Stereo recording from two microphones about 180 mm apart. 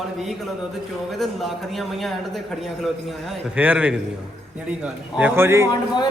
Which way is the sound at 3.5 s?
10° right (ahead or behind).